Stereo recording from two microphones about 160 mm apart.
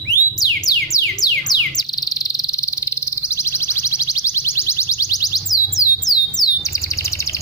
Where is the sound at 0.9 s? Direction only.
25° left (ahead or behind).